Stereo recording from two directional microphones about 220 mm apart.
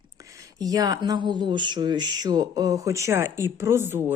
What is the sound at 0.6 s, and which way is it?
Speech, 15° right (ahead or behind).